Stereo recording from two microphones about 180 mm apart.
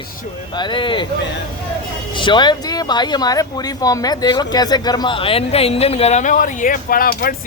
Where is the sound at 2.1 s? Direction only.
25° left (ahead or behind); by 7.4 s 55° left (ahead or behind).